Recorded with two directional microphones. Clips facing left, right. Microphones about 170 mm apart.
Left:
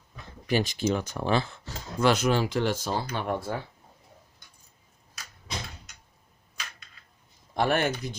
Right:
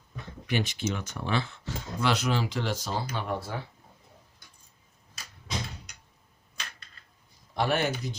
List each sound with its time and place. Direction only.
0.4 s speech: 35° left (ahead or behind)
7.5 s speech: 50° left (ahead or behind)